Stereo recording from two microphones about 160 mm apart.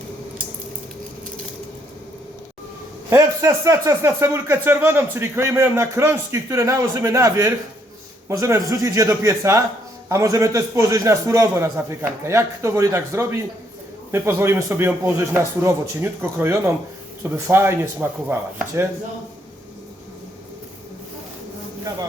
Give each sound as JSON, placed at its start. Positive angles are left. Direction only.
{"t": 3.1, "sound": "speech", "side_deg": -15}